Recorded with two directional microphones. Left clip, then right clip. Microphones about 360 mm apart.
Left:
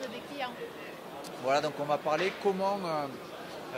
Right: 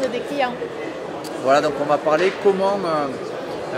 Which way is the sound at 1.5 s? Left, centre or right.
Left.